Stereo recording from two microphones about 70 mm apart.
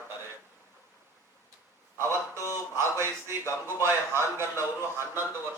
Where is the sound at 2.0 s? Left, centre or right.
Right.